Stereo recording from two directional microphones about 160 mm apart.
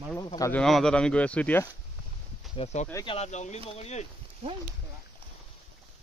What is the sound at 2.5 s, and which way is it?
Speech, 45° left (ahead or behind).